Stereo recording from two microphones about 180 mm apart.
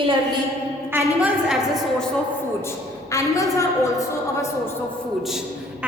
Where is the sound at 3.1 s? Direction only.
15° left (ahead or behind).